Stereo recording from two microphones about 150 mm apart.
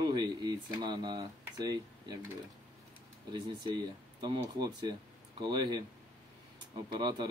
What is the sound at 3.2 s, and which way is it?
A man's voice, 30° right (ahead or behind).